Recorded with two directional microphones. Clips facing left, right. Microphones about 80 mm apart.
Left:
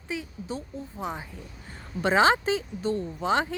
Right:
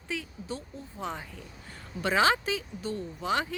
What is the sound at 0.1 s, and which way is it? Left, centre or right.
A woman's voice, centre.